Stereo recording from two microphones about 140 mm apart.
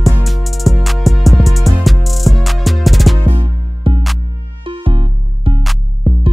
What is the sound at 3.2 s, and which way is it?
Music, 40° right (ahead or behind).